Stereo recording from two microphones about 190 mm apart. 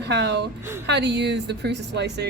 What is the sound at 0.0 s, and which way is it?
A woman's voice, 60° right (ahead or behind).